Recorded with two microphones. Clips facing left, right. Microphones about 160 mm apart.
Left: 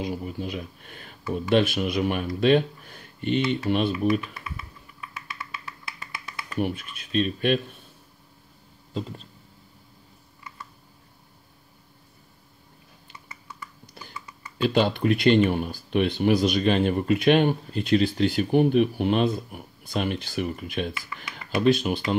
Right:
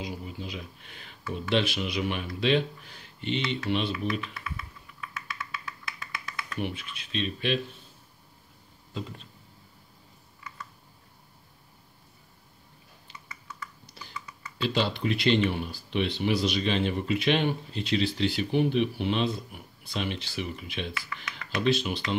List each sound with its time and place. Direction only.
0.0 s speech: 55° left (ahead or behind)
6.6 s speech: 50° left (ahead or behind)
8.9 s speech: 35° left (ahead or behind)
14.6 s speech: 50° left (ahead or behind)